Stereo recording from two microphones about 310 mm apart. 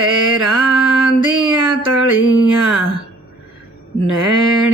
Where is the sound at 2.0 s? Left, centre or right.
Left.